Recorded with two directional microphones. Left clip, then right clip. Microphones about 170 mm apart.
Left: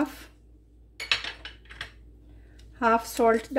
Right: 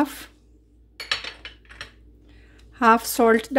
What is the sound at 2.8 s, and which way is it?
Speech, 60° right (ahead or behind).